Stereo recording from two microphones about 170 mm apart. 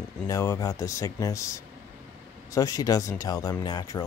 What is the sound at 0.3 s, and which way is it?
Speech, 20° left (ahead or behind).